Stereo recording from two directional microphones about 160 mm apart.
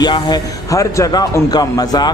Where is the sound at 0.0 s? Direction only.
25° left (ahead or behind).